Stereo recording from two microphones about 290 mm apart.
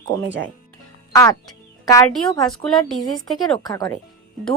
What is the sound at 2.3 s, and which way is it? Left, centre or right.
Speech, centre.